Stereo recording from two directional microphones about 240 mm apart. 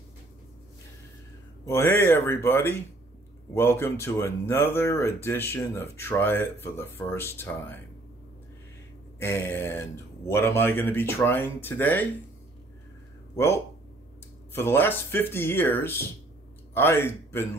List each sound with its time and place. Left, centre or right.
1.7 s speech: centre
9.2 s speech: centre
14.5 s speech: centre